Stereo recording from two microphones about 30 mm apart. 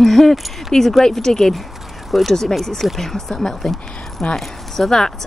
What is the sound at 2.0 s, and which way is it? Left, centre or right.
A woman's voice, centre.